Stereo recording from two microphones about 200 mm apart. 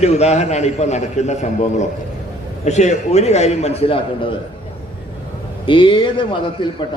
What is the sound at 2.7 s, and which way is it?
A man's voice, 35° left (ahead or behind).